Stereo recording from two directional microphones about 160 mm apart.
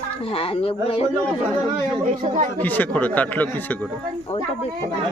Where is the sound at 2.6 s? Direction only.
10° left (ahead or behind).